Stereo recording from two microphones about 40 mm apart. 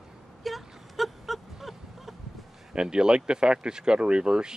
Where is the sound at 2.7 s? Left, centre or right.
Right.